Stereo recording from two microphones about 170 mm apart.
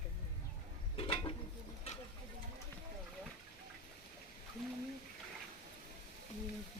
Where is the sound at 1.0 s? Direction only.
30° left (ahead or behind).